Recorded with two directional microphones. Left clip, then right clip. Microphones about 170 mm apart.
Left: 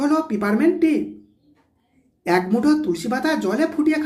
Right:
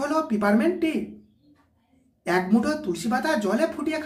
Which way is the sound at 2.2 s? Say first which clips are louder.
Left 4 dB; 20° left (ahead or behind).